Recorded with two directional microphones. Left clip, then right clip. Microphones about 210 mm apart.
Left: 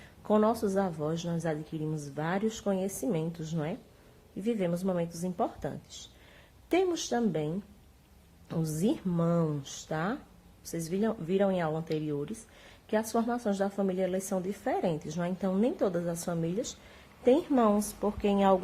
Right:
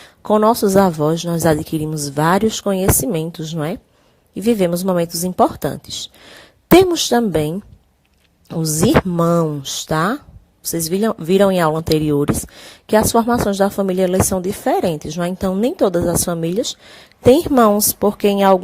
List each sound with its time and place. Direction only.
0.3 s a woman's voice: 40° right (ahead or behind)
6.7 s speech: 45° right (ahead or behind)
8.4 s a woman's voice: 35° right (ahead or behind)
9.1 s a woman's voice: 45° right (ahead or behind)